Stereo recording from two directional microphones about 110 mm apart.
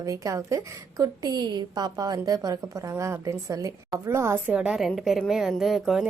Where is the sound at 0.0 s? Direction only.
30° right (ahead or behind).